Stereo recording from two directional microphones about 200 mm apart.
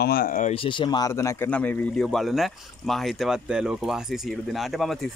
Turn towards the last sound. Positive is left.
turn(degrees=0)  # may be behind; listen again after turning